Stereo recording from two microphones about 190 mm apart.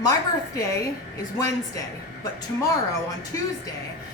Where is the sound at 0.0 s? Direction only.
15° left (ahead or behind).